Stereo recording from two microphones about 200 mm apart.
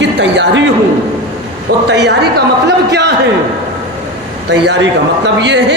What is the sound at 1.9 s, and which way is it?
Speech, 60° right (ahead or behind).